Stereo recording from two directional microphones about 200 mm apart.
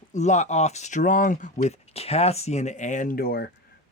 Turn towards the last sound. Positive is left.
turn(degrees=50)  # may be behind; listen again after turning